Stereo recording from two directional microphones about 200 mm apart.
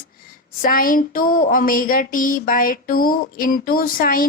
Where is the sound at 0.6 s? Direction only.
45° left (ahead or behind).